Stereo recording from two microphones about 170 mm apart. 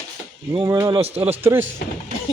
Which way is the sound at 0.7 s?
15° right (ahead or behind).